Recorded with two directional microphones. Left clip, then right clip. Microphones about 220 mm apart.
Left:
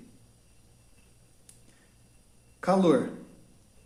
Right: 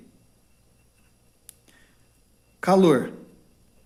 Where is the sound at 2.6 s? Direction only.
45° right (ahead or behind).